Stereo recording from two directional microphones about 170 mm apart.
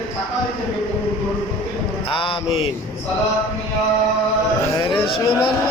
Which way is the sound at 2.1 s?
30° left (ahead or behind).